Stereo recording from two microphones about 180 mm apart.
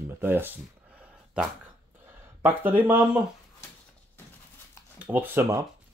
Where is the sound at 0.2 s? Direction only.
10° right (ahead or behind).